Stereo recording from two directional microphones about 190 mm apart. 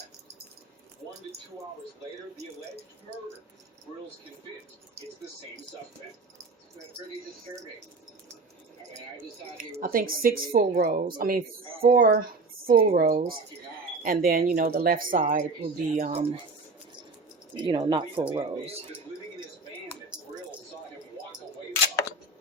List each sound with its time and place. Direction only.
9.8 s a woman's voice: 50° right (ahead or behind)
17.6 s speech: 25° right (ahead or behind)